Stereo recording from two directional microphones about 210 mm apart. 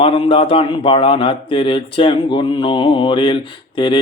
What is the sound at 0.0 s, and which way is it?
A man's voice, 25° left (ahead or behind).